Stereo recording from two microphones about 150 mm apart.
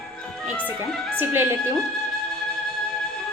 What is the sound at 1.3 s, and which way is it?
Speech, 15° right (ahead or behind).